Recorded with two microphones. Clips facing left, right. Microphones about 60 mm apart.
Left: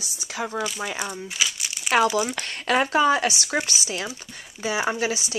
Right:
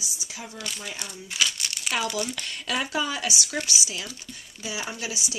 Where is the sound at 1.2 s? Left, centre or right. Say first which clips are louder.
Even; centre.